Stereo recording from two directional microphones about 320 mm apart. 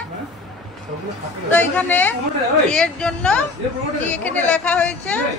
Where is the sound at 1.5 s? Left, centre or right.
Centre.